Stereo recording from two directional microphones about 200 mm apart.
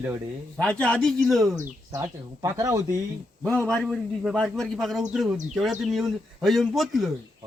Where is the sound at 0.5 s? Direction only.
5° left (ahead or behind).